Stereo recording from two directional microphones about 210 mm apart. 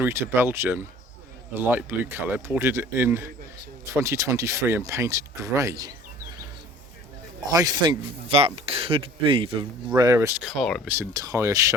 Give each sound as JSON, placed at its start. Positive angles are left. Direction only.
{"t": 0.0, "sound": "speech", "side_deg": -10}
{"t": 7.5, "sound": "speech", "side_deg": -20}
{"t": 10.8, "sound": "speech", "side_deg": -10}